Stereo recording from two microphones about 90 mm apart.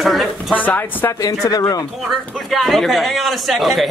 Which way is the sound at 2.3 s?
Centre (ahead or behind).